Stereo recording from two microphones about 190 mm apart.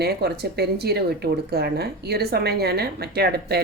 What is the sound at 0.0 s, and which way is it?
Speech, 60° right (ahead or behind).